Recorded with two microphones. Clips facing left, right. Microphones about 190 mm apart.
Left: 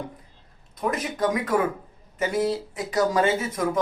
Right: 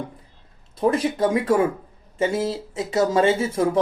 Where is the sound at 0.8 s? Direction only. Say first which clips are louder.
Right 6 dB; 30° right (ahead or behind).